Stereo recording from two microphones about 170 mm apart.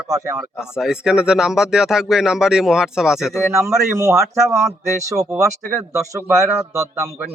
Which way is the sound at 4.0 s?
20° right (ahead or behind).